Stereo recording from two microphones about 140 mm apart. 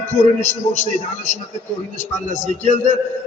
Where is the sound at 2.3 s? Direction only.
60° left (ahead or behind).